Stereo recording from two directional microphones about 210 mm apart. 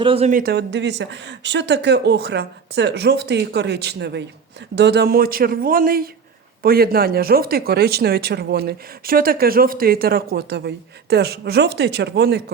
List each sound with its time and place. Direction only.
0.0 s speech: 25° right (ahead or behind)
0.3 s speech: 50° right (ahead or behind)